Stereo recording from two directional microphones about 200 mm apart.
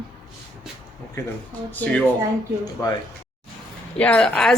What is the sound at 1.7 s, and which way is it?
Speech, 10° left (ahead or behind).